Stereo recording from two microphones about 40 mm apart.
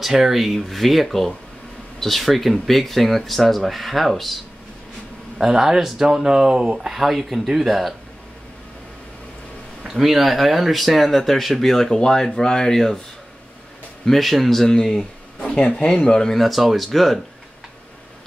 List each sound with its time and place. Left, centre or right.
0.0 s speech: centre
5.4 s speech: centre
6.0 s speech: centre
6.9 s speech: centre
9.9 s speech: centre
14.0 s speech: centre
16.3 s speech: centre